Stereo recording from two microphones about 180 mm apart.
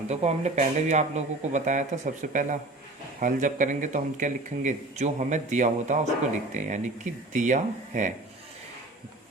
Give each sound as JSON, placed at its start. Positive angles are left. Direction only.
{"t": 0.1, "sound": "speech", "side_deg": -40}